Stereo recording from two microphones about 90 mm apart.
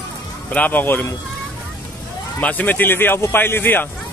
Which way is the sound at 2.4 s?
20° left (ahead or behind).